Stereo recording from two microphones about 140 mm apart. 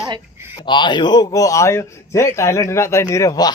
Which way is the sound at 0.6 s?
35° left (ahead or behind).